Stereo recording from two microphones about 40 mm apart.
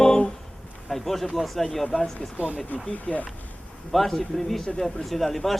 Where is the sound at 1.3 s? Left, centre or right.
Centre.